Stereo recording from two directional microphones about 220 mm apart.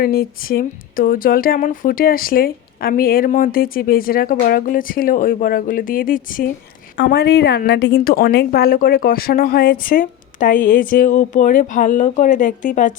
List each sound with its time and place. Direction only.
0.0 s a woman's voice: 45° left (ahead or behind)